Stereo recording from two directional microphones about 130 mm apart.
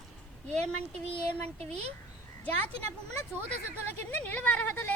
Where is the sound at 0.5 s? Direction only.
55° right (ahead or behind).